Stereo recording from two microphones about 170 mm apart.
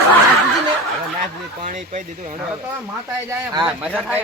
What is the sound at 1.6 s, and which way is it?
Speech, 45° right (ahead or behind).